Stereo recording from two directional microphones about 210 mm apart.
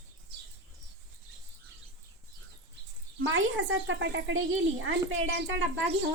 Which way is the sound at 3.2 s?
65° right (ahead or behind).